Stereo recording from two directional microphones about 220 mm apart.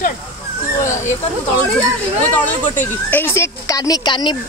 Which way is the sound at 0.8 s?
35° left (ahead or behind).